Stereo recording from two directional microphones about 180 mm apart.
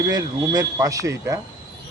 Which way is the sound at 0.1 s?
20° right (ahead or behind).